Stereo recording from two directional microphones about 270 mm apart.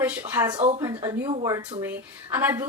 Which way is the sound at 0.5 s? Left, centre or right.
Right.